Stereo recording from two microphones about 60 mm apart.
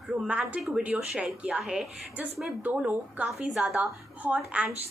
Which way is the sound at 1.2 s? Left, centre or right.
Right.